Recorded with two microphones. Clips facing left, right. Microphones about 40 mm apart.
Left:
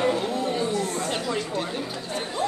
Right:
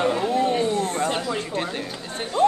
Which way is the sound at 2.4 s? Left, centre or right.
Right.